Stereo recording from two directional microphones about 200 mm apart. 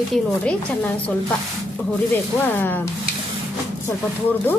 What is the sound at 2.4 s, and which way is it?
Speech, 10° left (ahead or behind).